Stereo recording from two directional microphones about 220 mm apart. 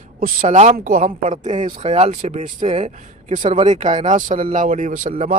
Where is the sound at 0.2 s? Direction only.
35° right (ahead or behind).